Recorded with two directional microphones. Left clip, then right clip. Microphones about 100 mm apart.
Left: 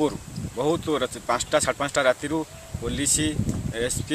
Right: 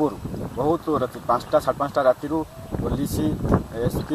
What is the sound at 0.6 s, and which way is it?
Speech, 50° left (ahead or behind).